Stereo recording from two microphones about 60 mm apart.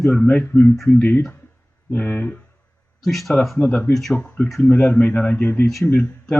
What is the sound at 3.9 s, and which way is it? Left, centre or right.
Speech, centre.